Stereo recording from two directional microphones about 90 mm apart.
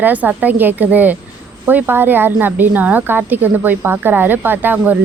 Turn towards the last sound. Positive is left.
turn(degrees=-20)  # may be behind; listen again after turning